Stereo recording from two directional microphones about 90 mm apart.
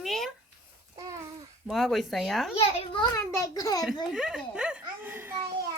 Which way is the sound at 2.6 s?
90° left.